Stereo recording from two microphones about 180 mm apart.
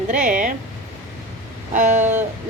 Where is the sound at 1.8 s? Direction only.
40° right (ahead or behind).